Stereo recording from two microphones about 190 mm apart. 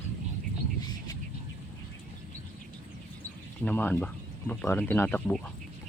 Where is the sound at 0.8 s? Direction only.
20° left (ahead or behind).